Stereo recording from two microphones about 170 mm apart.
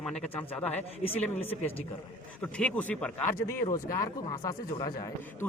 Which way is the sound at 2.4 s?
5° left (ahead or behind).